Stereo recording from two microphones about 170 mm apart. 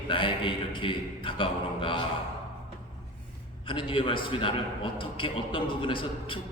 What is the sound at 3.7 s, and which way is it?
A man's voice, 30° left (ahead or behind).